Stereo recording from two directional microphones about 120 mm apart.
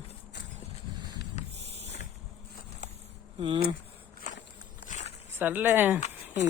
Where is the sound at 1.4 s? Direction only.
70° left (ahead or behind).